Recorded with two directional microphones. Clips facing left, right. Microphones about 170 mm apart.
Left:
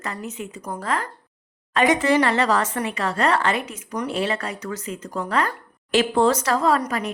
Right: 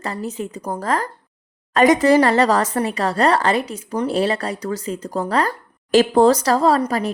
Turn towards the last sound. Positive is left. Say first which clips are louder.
# right 4 dB
turn(degrees=-35)  # may be behind; listen again after turning